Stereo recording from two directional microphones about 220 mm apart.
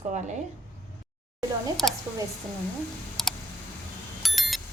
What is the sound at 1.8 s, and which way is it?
Speech, 15° right (ahead or behind).